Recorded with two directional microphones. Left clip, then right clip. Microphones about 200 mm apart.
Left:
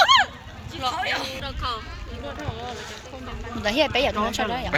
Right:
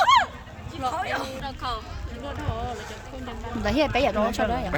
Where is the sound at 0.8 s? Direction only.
55° right (ahead or behind).